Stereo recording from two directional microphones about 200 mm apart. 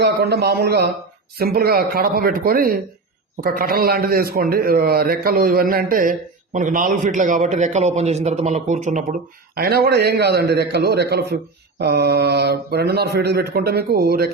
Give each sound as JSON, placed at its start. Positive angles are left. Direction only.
{"t": 0.0, "sound": "a man's voice", "side_deg": -55}
{"t": 9.6, "sound": "a man's voice", "side_deg": -50}